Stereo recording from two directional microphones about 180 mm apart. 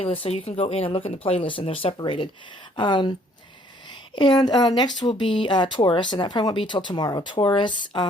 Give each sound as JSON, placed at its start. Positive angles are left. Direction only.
{"t": 0.0, "sound": "speech", "side_deg": 30}